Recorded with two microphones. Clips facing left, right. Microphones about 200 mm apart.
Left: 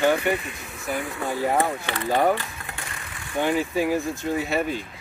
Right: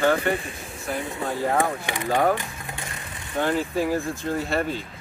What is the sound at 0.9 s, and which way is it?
Speech, 25° right (ahead or behind).